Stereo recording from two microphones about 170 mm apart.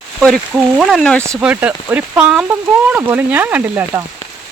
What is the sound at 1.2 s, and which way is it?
Speech, 10° right (ahead or behind).